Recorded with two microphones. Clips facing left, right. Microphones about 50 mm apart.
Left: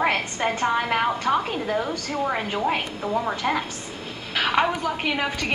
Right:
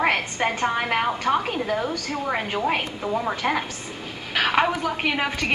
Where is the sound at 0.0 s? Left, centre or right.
Centre.